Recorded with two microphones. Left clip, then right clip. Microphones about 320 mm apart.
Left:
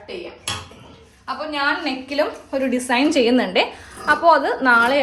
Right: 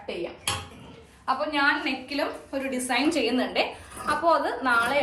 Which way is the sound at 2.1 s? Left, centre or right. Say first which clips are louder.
Left 8 dB; left.